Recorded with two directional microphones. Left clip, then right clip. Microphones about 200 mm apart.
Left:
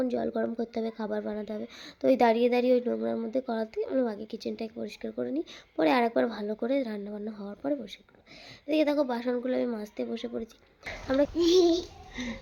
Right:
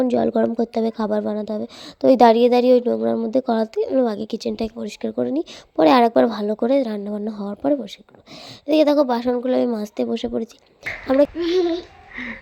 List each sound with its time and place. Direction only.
0.0 s speech: 35° right (ahead or behind)
11.3 s babbling: 15° left (ahead or behind)